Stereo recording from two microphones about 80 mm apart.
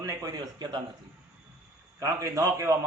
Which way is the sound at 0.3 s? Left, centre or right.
Right.